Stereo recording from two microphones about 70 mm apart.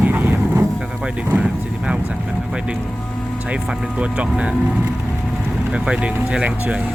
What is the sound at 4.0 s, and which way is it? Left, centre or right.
Speech, centre.